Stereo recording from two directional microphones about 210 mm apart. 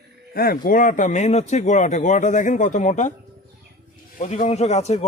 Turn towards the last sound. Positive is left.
turn(degrees=30)  # may be behind; listen again after turning